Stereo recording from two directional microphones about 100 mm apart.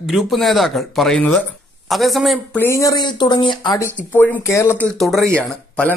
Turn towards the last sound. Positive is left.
turn(degrees=15)  # may be behind; listen again after turning